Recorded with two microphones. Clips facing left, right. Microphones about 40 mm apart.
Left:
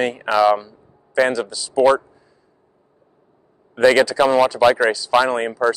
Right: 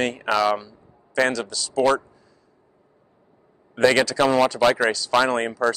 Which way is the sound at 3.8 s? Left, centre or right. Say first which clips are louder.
Left 4 dB; centre.